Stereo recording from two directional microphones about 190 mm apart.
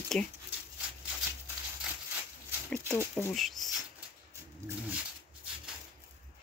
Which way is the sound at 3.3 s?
Centre (ahead or behind).